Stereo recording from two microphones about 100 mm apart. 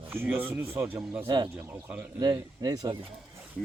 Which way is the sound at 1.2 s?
45° right (ahead or behind).